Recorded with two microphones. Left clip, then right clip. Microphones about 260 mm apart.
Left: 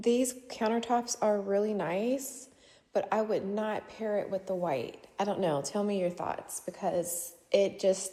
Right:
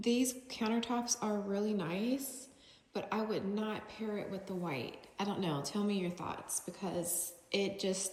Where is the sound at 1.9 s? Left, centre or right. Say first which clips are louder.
Left 7 dB; left.